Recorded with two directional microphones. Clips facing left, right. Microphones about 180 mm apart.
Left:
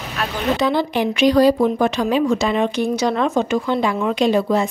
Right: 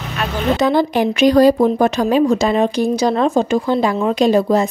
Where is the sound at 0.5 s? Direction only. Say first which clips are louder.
Right 5 dB; 45° right (ahead or behind).